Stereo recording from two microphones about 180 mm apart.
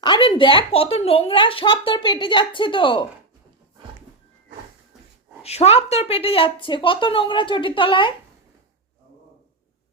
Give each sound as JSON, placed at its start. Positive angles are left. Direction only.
{"t": 0.0, "sound": "speech", "side_deg": 25}
{"t": 5.4, "sound": "speech", "side_deg": 35}